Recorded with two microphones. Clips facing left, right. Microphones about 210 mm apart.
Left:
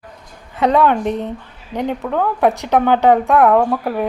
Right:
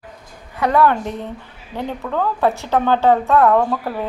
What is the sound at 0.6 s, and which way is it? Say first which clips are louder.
A woman's voice: left 2 dB; 20° left (ahead or behind).